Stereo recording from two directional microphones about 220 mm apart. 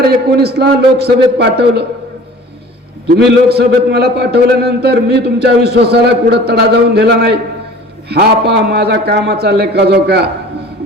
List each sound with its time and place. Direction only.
0.1 s a man's voice: 45° right (ahead or behind)
3.2 s a man's voice: 50° right (ahead or behind)